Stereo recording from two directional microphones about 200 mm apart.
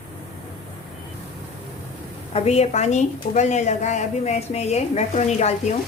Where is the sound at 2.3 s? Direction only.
30° left (ahead or behind).